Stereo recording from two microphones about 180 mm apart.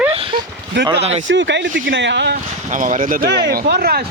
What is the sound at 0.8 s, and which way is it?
Speech, 80° right.